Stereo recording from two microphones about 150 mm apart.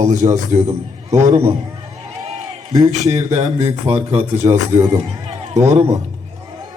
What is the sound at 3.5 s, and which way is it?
Speech, 40° right (ahead or behind).